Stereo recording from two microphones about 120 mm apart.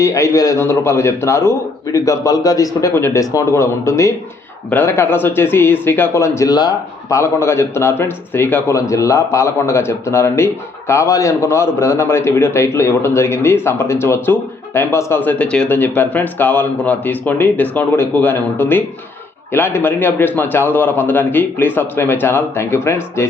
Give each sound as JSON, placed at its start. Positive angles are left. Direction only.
{"t": 0.0, "sound": "speech", "side_deg": 25}